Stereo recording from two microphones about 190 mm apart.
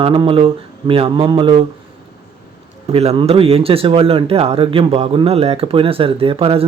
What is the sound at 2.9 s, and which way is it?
A man's voice, 30° right (ahead or behind).